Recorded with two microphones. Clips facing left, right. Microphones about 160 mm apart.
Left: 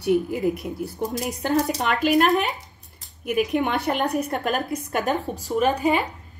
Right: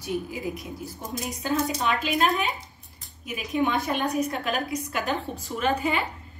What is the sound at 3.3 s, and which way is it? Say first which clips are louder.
A woman's voice: left 4 dB; 65° left (ahead or behind).